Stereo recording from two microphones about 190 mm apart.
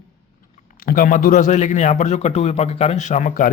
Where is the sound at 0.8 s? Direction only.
45° left (ahead or behind).